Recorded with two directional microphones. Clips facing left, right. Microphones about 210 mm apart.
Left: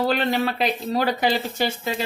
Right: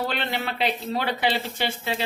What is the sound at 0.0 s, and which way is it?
Speech, 40° left (ahead or behind).